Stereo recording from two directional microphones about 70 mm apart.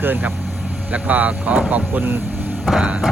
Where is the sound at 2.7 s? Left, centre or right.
Centre.